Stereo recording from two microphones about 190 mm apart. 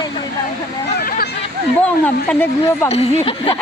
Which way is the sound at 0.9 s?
55° left (ahead or behind).